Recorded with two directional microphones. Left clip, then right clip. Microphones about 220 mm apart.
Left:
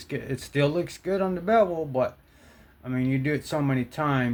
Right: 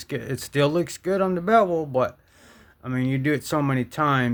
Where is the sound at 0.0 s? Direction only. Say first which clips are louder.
Right 3 dB; 45° right (ahead or behind).